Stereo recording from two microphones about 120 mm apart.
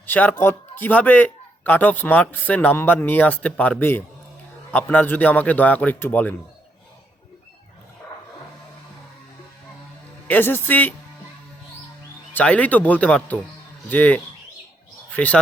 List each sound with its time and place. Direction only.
0.0 s a man's voice: 15° left (ahead or behind)
10.2 s a man's voice: 15° left (ahead or behind)
12.3 s a man's voice: 10° left (ahead or behind)